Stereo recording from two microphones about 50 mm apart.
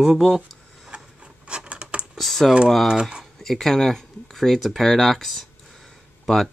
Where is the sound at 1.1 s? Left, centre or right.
Right.